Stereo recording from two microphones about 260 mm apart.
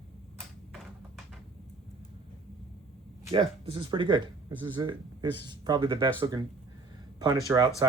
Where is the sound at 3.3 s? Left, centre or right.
Right.